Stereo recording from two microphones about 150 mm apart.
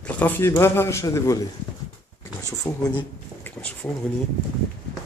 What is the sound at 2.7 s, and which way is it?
Speech, 15° left (ahead or behind).